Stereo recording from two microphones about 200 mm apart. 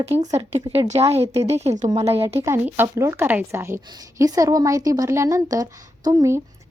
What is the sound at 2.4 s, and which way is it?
A woman's voice, 10° right (ahead or behind).